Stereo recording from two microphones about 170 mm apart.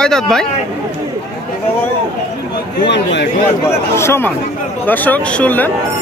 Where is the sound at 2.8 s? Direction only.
90° left.